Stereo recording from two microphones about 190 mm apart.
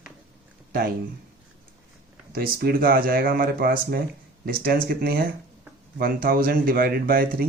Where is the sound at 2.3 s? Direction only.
55° right (ahead or behind).